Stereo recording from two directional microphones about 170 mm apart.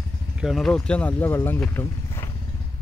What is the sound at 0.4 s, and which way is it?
Speech, centre (ahead or behind).